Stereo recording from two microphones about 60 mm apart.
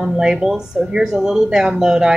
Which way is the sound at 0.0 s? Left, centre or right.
Centre.